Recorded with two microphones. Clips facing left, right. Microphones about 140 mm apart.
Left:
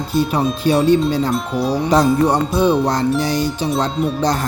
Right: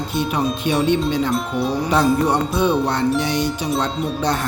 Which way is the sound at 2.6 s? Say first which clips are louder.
Left 3 dB; 35° left (ahead or behind).